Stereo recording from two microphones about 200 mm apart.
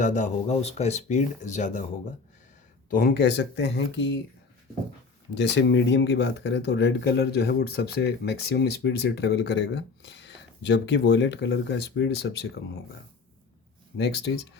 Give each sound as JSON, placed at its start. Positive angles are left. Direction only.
{"t": 0.0, "sound": "speech", "side_deg": 35}
{"t": 2.9, "sound": "speech", "side_deg": 50}
{"t": 5.3, "sound": "speech", "side_deg": 60}
{"t": 14.0, "sound": "speech", "side_deg": 55}